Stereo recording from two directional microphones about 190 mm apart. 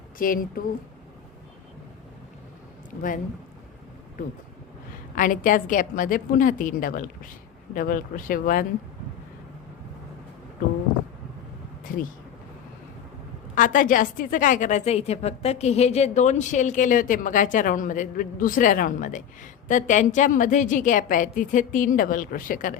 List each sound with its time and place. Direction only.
0.2 s a woman's voice: 45° left (ahead or behind)
5.1 s a woman's voice: 45° left (ahead or behind)
11.9 s a woman's voice: 45° left (ahead or behind)
13.6 s a woman's voice: 45° left (ahead or behind)